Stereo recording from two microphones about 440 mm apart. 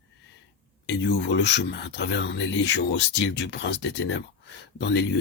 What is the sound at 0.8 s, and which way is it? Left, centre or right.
Speech, left.